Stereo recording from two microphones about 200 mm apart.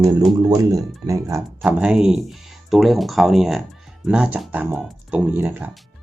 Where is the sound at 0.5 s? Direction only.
15° right (ahead or behind).